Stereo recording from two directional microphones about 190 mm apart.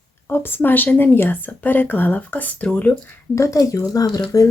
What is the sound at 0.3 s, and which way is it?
Speech, 10° left (ahead or behind).